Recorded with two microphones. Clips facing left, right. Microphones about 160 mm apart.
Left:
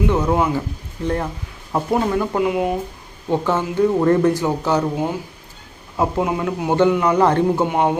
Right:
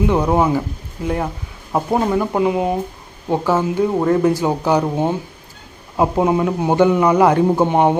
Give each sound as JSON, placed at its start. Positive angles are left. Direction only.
{"t": 0.1, "sound": "speech", "side_deg": -20}
{"t": 1.0, "sound": "speech", "side_deg": -10}
{"t": 3.2, "sound": "speech", "side_deg": -10}
{"t": 6.0, "sound": "speech", "side_deg": -25}
{"t": 7.6, "sound": "speech", "side_deg": -25}